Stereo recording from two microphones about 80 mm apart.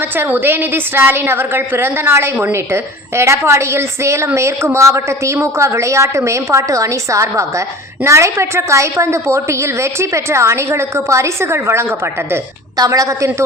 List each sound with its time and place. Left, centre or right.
0.0 s a woman's voice: right
12.7 s a woman's voice: right